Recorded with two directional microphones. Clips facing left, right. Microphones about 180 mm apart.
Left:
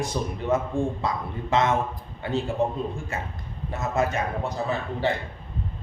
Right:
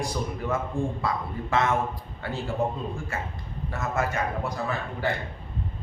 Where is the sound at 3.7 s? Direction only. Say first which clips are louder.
Left 3 dB; 20° left (ahead or behind).